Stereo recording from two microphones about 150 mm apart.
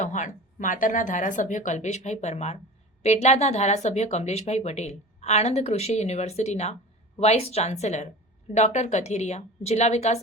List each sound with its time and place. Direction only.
0.0 s speech: 55° left (ahead or behind)